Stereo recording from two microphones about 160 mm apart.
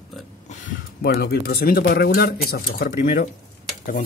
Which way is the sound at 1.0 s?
80° left.